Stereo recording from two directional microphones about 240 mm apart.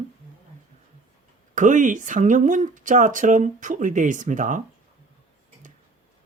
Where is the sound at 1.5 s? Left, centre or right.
Right.